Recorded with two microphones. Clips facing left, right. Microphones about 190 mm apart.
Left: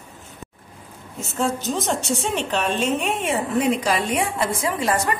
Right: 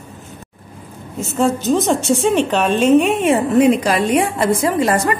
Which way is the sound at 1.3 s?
90° right.